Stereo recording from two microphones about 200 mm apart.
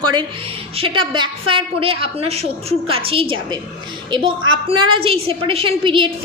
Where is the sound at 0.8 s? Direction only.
25° right (ahead or behind).